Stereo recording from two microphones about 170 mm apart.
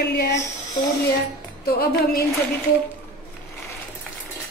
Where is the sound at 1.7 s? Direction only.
65° left (ahead or behind).